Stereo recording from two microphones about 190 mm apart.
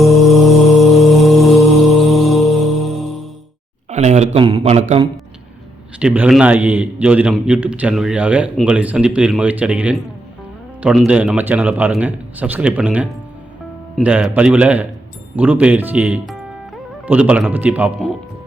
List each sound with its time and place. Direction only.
0.0 s mantra: centre (ahead or behind)
3.8 s a sound: 35° right (ahead or behind)
6.0 s a man's voice: 5° right (ahead or behind)